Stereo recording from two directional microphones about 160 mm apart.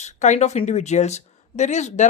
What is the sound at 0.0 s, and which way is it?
Speech, 45° left (ahead or behind).